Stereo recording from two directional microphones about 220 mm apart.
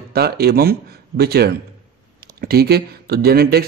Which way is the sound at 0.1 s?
45° right (ahead or behind).